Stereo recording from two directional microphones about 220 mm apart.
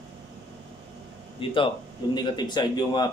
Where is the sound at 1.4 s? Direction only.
25° left (ahead or behind).